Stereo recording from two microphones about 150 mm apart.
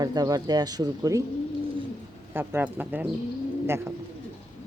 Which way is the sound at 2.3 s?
15° right (ahead or behind).